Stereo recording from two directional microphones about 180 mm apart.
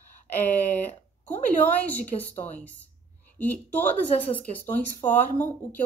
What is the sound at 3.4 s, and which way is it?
Speech, 10° left (ahead or behind).